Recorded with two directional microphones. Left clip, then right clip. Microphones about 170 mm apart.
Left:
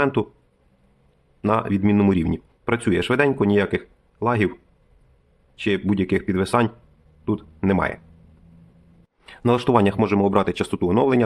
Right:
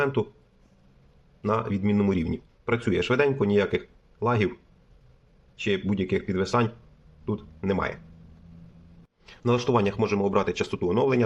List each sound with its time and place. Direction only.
0.0 s speech: 35° left (ahead or behind)
1.4 s speech: 35° left (ahead or behind)
5.5 s speech: 30° left (ahead or behind)
9.2 s speech: 35° left (ahead or behind)